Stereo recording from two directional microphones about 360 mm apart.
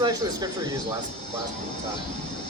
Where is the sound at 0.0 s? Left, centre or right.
Centre.